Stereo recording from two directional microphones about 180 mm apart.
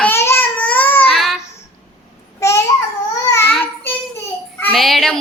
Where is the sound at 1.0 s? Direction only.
Centre (ahead or behind).